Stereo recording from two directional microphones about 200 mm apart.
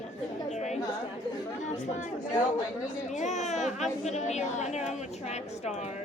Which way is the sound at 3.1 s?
35° left (ahead or behind).